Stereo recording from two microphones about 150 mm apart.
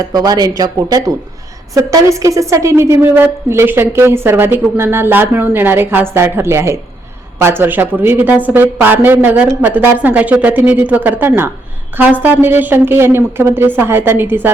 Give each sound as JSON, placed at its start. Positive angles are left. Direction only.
{"t": 0.1, "sound": "a woman's voice", "side_deg": -25}